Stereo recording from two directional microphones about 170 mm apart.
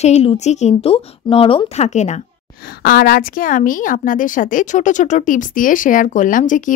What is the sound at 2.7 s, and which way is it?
A woman's voice, 60° left (ahead or behind).